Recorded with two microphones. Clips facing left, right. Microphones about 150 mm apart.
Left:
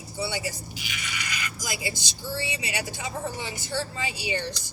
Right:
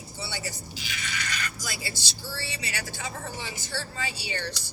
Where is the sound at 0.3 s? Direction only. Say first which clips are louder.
Left 5 dB; 10° left (ahead or behind).